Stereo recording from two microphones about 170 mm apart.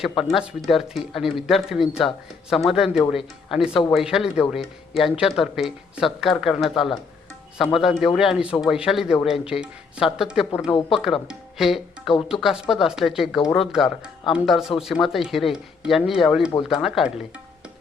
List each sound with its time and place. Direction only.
0.2 s speech: centre (ahead or behind)